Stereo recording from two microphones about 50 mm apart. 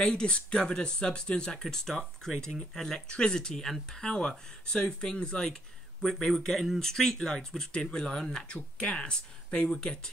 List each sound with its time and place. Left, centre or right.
0.0 s speech: centre
1.6 s speech: centre